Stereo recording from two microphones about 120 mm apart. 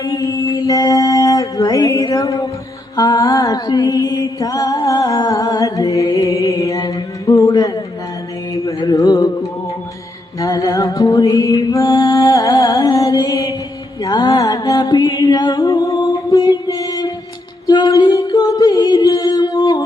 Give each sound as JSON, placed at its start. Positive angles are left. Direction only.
{"t": 0.0, "sound": "music", "side_deg": 30}
{"t": 2.9, "sound": "mantra", "side_deg": 30}
{"t": 8.8, "sound": "music", "side_deg": 30}